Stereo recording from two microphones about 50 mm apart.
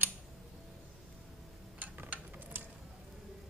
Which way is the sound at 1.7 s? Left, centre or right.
Right.